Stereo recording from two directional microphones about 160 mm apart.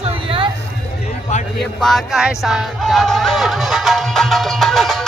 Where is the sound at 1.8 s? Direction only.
Centre (ahead or behind).